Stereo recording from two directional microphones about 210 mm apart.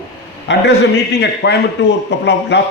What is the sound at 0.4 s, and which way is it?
A man's voice, 55° left (ahead or behind).